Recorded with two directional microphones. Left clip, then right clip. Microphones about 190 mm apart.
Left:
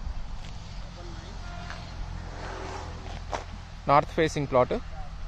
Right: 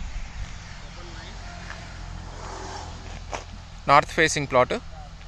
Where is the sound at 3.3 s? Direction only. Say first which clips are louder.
Even; 5° left (ahead or behind).